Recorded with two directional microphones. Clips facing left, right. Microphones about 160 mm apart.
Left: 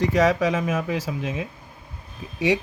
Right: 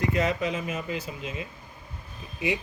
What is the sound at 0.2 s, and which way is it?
Speech, 90° left.